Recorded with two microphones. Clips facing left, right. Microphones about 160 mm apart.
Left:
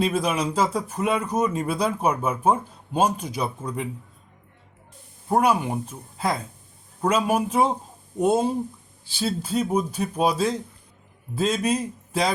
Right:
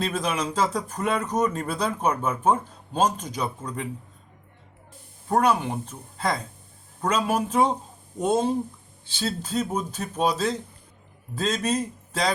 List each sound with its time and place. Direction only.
0.0 s speech: 10° left (ahead or behind)
5.3 s speech: 10° left (ahead or behind)